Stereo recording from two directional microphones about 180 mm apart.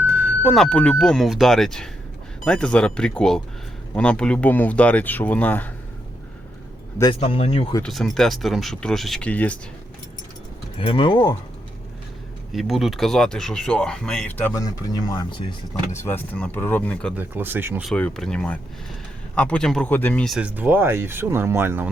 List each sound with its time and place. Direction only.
0.1 s a sound: 10° right (ahead or behind)
0.5 s speech: 5° left (ahead or behind)
7.0 s speech: 30° left (ahead or behind)
7.8 s speech: centre (ahead or behind)
10.8 s speech: 30° left (ahead or behind)
12.5 s speech: centre (ahead or behind); by 15.5 s 25° left (ahead or behind)
16.0 s speech: 10° left (ahead or behind)
17.2 s speech: 10° right (ahead or behind)
17.8 s speech: 5° left (ahead or behind); by 21.8 s 15° right (ahead or behind)